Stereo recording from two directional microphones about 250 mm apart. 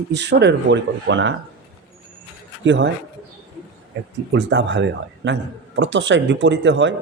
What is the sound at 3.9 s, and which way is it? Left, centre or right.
Speech, right.